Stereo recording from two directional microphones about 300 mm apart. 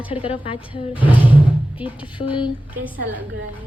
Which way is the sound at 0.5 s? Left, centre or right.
Centre.